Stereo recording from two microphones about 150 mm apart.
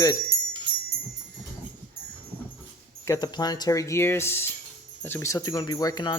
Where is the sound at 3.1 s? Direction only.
25° left (ahead or behind).